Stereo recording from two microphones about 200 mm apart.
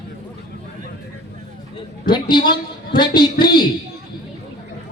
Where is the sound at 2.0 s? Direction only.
20° left (ahead or behind).